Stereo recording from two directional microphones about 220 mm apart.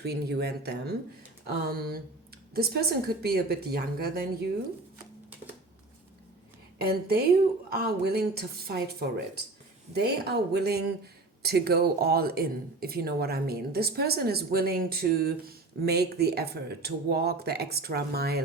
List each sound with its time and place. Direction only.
0.0 s speech: 45° right (ahead or behind)
6.8 s speech: 45° right (ahead or behind)